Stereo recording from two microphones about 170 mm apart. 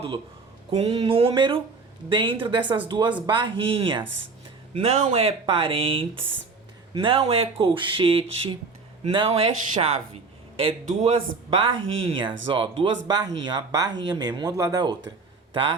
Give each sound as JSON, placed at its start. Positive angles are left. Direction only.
{"t": 0.7, "sound": "speech", "side_deg": -40}